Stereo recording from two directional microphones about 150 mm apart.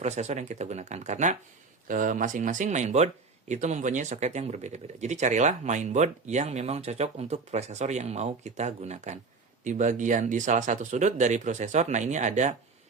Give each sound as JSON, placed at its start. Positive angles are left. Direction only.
{"t": 0.0, "sound": "speech", "side_deg": -50}